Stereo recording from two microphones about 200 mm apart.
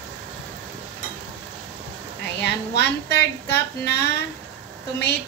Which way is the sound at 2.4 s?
55° left (ahead or behind).